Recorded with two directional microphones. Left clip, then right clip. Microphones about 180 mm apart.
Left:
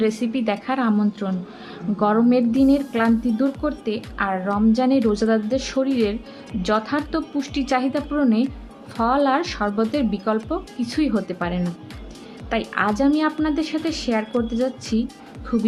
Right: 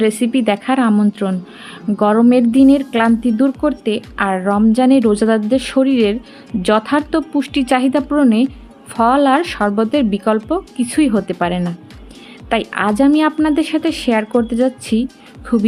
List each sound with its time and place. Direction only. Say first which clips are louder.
0.0 s a woman's voice: right 7 dB; 45° right (ahead or behind)